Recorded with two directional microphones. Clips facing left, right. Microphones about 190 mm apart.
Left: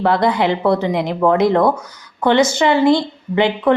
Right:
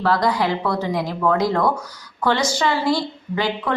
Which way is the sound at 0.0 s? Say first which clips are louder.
Left 4 dB; 20° left (ahead or behind).